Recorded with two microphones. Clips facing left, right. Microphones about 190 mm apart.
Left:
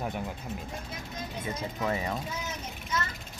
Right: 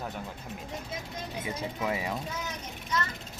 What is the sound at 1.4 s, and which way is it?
Speech, 10° right (ahead or behind).